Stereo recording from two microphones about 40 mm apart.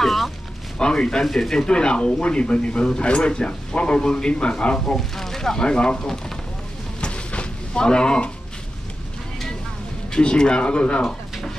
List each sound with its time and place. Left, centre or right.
0.0 s a sound: centre
0.7 s speech: left
1.2 s speech: centre
1.5 s speech: centre
4.9 s speech: centre
5.7 s speech: left
7.0 s a sound: left
10.1 s speech: left